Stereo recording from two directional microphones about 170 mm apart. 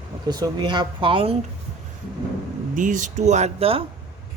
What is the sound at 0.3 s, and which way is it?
Speech, 25° right (ahead or behind).